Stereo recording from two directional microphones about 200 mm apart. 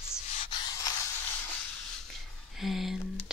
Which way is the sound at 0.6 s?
20° left (ahead or behind).